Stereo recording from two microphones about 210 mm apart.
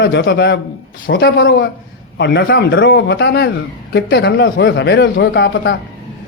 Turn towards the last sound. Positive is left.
turn(degrees=55)  # may be behind; listen again after turning